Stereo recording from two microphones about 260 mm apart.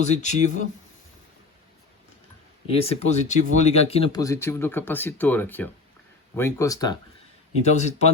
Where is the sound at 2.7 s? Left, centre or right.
Left.